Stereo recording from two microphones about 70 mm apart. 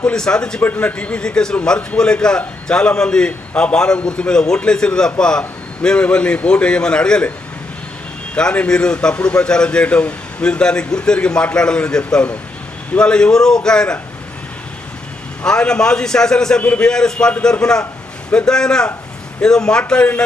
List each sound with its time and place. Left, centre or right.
0.0 s a man's voice: centre
0.6 s a man's voice: left
8.4 s a man's voice: centre
15.4 s a man's voice: centre